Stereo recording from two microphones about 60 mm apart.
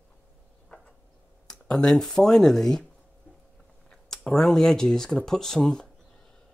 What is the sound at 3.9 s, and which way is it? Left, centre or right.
Speech, centre.